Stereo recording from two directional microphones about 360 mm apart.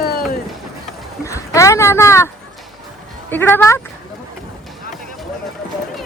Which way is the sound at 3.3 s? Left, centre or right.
Centre.